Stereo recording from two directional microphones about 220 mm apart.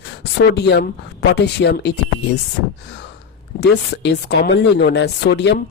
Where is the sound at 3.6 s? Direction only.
50° left (ahead or behind).